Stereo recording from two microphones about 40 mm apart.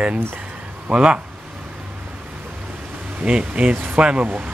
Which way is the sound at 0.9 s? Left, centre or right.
Right.